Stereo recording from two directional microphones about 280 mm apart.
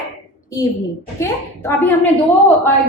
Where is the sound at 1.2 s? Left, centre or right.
Centre.